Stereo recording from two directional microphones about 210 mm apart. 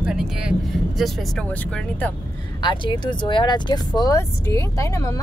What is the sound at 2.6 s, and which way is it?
Speech, 20° left (ahead or behind).